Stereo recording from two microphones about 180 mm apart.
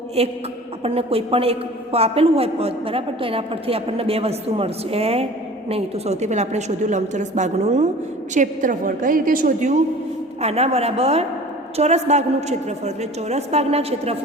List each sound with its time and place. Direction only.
0.2 s a man's voice: 35° right (ahead or behind)
10.4 s a man's voice: 35° right (ahead or behind)